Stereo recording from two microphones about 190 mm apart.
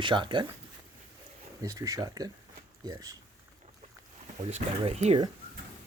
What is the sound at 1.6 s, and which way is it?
Speech, 15° right (ahead or behind).